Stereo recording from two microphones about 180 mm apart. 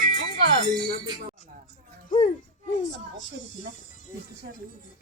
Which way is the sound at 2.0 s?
45° left (ahead or behind).